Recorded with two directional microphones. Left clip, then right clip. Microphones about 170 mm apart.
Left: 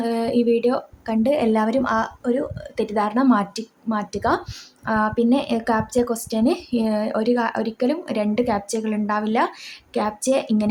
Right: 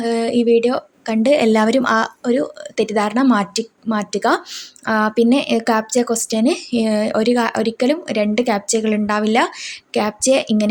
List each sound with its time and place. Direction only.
0.0 s speech: 15° right (ahead or behind)